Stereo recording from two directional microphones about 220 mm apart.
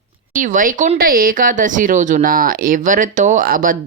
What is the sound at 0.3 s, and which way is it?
Speech, 35° right (ahead or behind).